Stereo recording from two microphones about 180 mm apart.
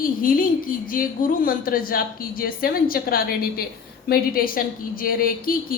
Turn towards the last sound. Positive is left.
turn(degrees=55)  # may be behind; listen again after turning